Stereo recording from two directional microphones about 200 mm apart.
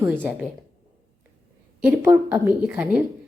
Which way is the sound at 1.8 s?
10° right (ahead or behind).